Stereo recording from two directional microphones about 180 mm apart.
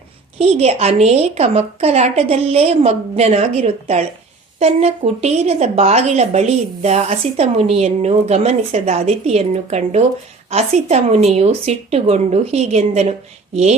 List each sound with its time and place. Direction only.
0.3 s speech: 35° right (ahead or behind)